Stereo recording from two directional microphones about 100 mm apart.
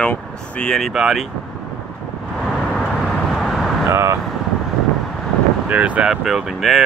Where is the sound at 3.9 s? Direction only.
30° right (ahead or behind).